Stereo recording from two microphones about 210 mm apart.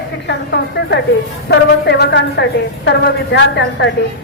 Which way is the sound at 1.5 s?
50° left (ahead or behind).